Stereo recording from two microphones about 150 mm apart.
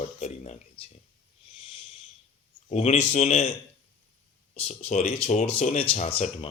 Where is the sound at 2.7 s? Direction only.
45° left (ahead or behind).